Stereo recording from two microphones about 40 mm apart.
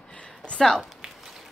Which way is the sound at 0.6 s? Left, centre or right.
Centre.